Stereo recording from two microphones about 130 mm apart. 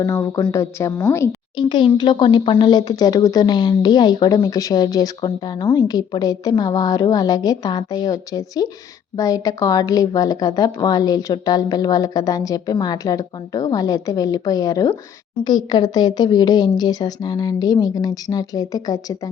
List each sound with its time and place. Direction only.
0.0 s a woman's voice: 25° left (ahead or behind)
1.5 s a woman's voice: 35° left (ahead or behind)